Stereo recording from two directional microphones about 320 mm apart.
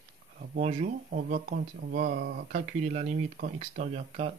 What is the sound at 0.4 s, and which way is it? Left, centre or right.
Speech, right.